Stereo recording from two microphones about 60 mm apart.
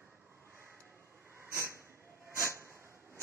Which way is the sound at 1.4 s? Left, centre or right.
Right.